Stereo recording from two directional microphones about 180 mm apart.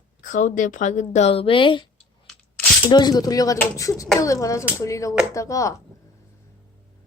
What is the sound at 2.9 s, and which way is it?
Speech, 20° left (ahead or behind).